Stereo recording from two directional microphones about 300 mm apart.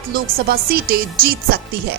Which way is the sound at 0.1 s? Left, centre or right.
Right.